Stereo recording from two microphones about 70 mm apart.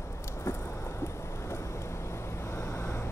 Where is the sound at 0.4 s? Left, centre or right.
Left.